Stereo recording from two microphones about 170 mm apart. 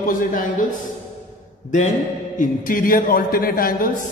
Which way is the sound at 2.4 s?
55° left (ahead or behind).